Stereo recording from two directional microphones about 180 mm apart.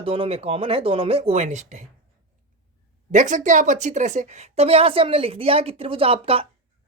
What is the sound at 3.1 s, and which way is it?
A woman's voice, 45° right (ahead or behind).